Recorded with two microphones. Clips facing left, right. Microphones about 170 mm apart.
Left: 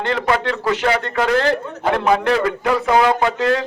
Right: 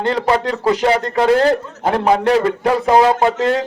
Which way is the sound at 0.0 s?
30° right (ahead or behind).